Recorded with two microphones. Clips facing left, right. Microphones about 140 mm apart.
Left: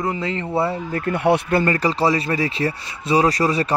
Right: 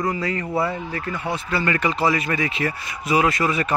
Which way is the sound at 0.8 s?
45° left (ahead or behind).